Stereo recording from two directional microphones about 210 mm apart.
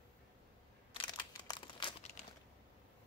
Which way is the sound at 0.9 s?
20° left (ahead or behind).